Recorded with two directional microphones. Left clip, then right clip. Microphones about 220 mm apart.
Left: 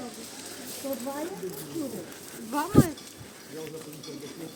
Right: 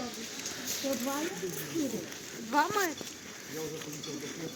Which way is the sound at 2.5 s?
45° left (ahead or behind).